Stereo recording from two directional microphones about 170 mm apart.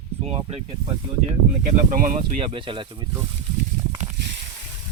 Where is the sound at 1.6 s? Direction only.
50° right (ahead or behind).